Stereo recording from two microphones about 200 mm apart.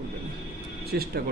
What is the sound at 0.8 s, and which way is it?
Speech, 50° right (ahead or behind).